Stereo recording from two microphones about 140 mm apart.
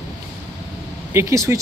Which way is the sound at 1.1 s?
20° right (ahead or behind).